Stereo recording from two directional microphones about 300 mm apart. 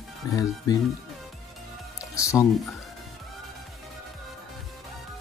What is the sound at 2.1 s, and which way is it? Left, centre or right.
Speech, centre.